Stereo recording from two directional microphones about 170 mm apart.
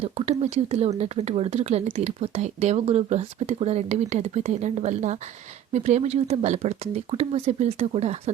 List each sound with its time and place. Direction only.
0.0 s speech: 40° right (ahead or behind)